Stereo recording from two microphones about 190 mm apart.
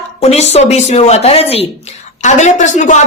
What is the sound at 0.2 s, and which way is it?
Speech, 35° left (ahead or behind).